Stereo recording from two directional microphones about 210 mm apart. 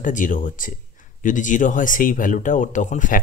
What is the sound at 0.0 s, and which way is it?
Speech, 40° left (ahead or behind).